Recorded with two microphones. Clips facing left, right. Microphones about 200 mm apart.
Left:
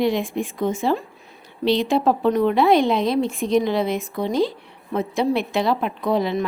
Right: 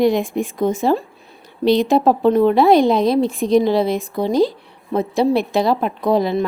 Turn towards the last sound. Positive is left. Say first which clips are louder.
# right 4 dB
turn(degrees=-35)  # may be behind; listen again after turning